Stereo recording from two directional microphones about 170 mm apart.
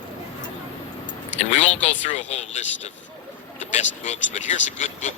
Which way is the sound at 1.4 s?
45° left (ahead or behind).